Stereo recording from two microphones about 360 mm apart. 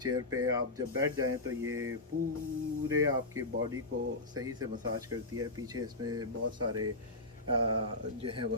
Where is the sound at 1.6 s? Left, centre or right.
Right.